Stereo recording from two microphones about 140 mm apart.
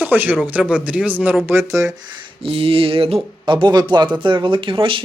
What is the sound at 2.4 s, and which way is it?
Speech, 40° right (ahead or behind).